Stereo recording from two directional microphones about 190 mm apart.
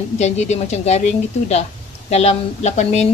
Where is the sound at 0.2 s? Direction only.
35° left (ahead or behind).